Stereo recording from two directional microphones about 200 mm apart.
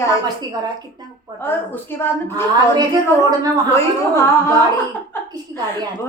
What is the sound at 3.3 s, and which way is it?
Speech, 20° right (ahead or behind).